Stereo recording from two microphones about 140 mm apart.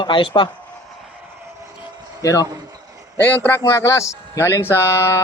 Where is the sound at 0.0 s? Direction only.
35° left (ahead or behind).